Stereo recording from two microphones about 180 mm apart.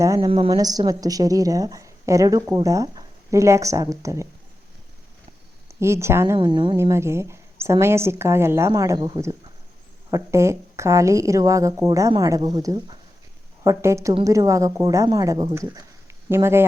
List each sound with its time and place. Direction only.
0.0 s a woman's voice: 15° right (ahead or behind)
0.3 s a woman's voice: 30° right (ahead or behind)
5.6 s speech: 15° right (ahead or behind)
6.3 s a woman's voice: 30° right (ahead or behind)
6.7 s a woman's voice: 15° right (ahead or behind)